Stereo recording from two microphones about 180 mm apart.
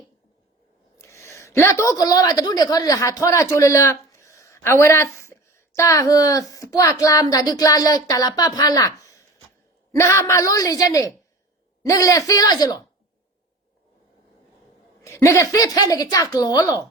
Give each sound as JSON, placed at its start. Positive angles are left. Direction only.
{"t": 0.9, "sound": "a woman's voice", "side_deg": 15}
{"t": 15.0, "sound": "a woman's voice", "side_deg": 15}